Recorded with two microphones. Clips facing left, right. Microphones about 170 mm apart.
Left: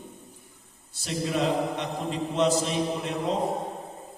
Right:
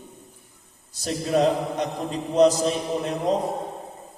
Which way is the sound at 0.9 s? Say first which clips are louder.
Right 5 dB; 40° right (ahead or behind).